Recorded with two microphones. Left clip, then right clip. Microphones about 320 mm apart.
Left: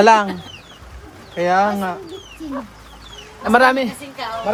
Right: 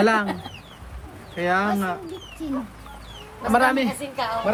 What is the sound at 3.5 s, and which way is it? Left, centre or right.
Speech, left.